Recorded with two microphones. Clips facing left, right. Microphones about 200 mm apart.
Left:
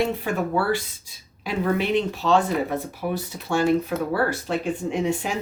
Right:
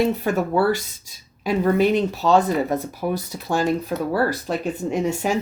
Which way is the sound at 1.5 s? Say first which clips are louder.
Right 5 dB; 40° right (ahead or behind).